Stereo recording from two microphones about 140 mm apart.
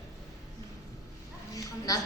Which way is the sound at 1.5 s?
25° left (ahead or behind).